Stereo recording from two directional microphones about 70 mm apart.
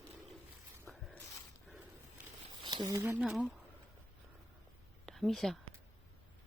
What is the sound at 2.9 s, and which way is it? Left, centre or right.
Speech, right.